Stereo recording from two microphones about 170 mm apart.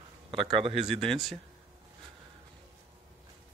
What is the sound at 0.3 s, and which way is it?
Speech, 30° right (ahead or behind).